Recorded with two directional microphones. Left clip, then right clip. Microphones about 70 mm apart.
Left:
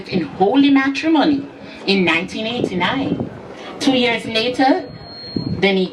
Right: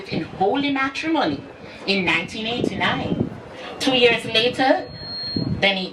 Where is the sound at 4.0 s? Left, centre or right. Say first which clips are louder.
Right 1 dB; centre.